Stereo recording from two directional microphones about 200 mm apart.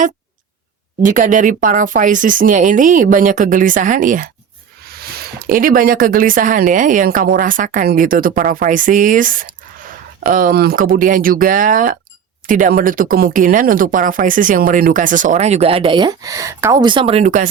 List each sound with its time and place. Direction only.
1.0 s speech: 40° right (ahead or behind)